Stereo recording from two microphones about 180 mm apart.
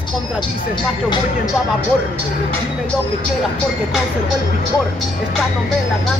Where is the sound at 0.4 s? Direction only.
25° left (ahead or behind).